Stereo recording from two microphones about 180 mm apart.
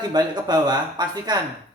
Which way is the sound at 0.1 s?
25° right (ahead or behind).